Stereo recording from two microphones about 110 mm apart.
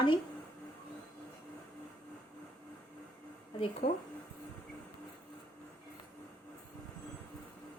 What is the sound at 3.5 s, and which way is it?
Speech, 55° left (ahead or behind).